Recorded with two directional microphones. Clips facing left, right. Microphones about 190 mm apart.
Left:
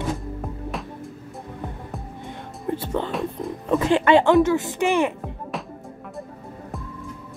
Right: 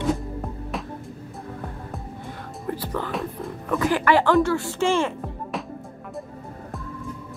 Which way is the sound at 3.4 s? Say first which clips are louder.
Left 2 dB; 20° left (ahead or behind).